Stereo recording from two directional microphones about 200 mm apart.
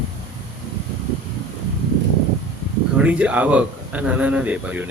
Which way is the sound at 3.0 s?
5° right (ahead or behind).